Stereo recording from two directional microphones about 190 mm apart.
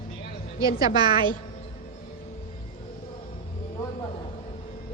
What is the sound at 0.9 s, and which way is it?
Speech, 25° right (ahead or behind).